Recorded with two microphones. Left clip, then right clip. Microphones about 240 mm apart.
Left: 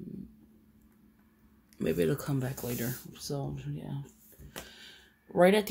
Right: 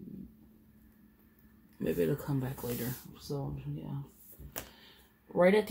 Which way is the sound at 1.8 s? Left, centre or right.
Left.